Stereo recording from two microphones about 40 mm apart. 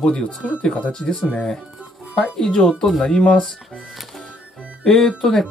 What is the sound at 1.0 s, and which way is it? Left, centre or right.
Speech, left.